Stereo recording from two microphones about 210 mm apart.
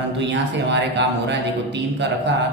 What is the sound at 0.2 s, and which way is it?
Speech, 55° right (ahead or behind).